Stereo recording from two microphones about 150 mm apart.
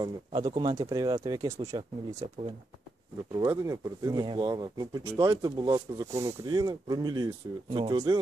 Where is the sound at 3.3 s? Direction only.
20° right (ahead or behind).